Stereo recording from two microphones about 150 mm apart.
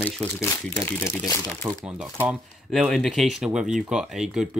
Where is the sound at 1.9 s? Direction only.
5° right (ahead or behind).